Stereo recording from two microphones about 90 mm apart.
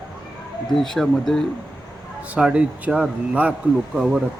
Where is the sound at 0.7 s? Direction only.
5° left (ahead or behind).